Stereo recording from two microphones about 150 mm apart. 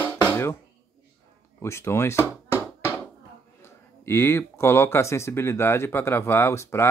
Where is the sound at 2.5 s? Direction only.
15° right (ahead or behind).